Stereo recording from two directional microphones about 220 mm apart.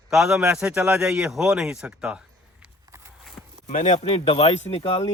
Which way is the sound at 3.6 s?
35° left (ahead or behind).